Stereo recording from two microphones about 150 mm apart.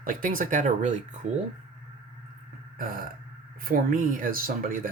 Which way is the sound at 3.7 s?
65° right (ahead or behind).